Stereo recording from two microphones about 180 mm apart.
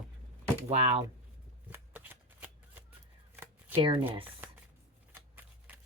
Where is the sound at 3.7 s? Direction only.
30° right (ahead or behind).